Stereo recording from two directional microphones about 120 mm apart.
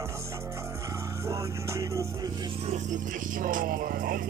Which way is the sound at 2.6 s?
70° right (ahead or behind).